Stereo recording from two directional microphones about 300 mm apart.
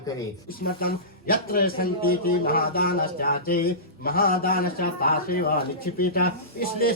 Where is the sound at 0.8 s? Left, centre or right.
Left.